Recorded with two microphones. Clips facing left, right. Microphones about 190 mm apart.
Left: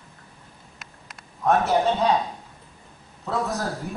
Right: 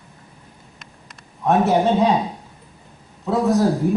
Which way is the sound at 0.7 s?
Centre (ahead or behind).